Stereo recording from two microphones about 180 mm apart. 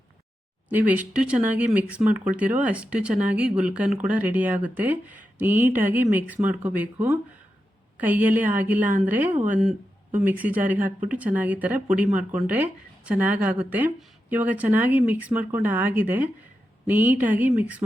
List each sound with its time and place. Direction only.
0.7 s speech: 10° right (ahead or behind)
9.3 s speech: 45° right (ahead or behind)
9.6 s a sound: 5° right (ahead or behind)
10.2 s speech: 10° right (ahead or behind)